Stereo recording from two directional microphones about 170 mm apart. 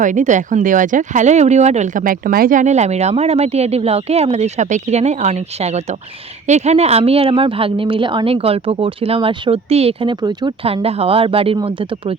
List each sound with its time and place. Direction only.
0.0 s speech: 50° right (ahead or behind); by 12.1 s 30° right (ahead or behind)